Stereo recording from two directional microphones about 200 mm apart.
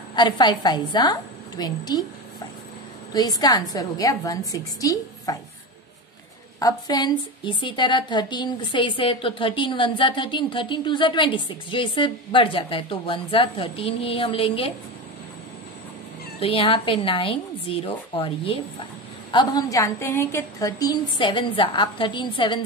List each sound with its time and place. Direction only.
0.1 s a woman's voice: 20° left (ahead or behind)
3.1 s a woman's voice: 20° left (ahead or behind)
6.6 s a woman's voice: 20° left (ahead or behind)
16.3 s a woman's voice: 25° left (ahead or behind)